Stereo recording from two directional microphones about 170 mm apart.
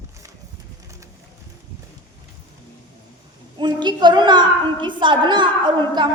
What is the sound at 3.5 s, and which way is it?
A woman's voice, 25° right (ahead or behind).